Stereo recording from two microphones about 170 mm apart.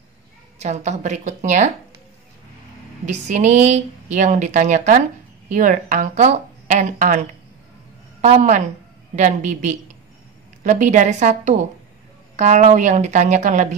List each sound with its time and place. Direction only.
0.6 s speech: 40° right (ahead or behind)
3.1 s a woman's voice: 45° right (ahead or behind)